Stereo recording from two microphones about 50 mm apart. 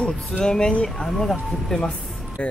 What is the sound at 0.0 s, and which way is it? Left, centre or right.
Speech, centre.